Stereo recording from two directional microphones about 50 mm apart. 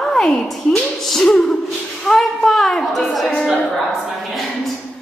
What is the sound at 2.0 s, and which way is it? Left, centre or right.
A child's voice, centre.